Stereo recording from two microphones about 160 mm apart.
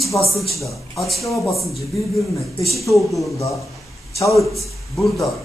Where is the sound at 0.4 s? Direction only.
Centre (ahead or behind).